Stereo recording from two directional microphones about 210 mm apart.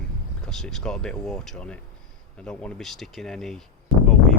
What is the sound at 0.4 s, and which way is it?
Speech, 5° left (ahead or behind).